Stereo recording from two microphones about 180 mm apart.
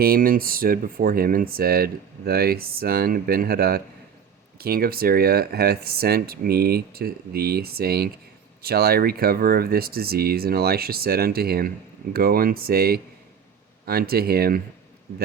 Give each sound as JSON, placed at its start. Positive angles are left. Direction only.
{"t": 0.0, "sound": "speech", "side_deg": -55}